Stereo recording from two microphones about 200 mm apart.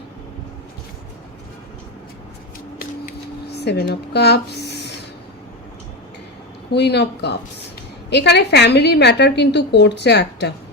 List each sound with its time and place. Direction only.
3.6 s speech: 55° left (ahead or behind)
6.7 s a woman's voice: 55° left (ahead or behind)